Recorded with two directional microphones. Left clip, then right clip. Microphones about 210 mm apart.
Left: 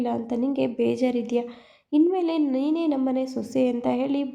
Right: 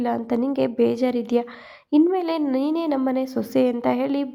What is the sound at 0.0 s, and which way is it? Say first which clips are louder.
A woman's voice: right 3 dB; 20° right (ahead or behind).